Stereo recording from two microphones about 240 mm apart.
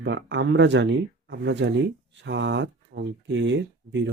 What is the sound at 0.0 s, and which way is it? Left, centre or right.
Speech, right.